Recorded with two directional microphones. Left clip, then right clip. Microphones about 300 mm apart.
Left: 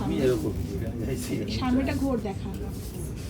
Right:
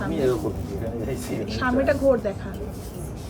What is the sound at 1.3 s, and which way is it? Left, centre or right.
Speech, centre.